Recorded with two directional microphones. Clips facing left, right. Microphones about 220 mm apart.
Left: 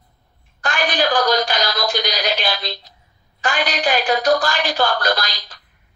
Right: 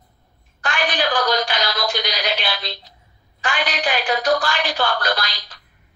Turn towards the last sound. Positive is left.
turn(degrees=40)  # may be behind; listen again after turning